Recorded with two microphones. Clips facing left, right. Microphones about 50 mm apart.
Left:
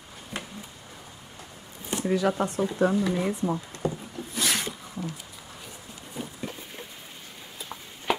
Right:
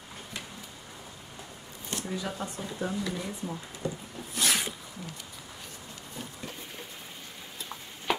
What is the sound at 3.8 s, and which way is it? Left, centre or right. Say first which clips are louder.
Wood: left 4 dB; centre.